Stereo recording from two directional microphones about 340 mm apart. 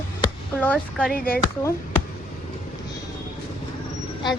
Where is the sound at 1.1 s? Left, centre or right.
Left.